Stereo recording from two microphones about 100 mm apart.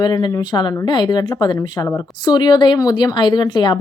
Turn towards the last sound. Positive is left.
turn(degrees=45)  # may be behind; listen again after turning